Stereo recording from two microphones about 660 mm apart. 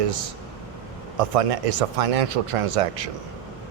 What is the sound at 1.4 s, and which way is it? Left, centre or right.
A man's voice, right.